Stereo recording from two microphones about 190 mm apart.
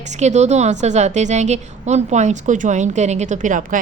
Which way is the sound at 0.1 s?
35° right (ahead or behind).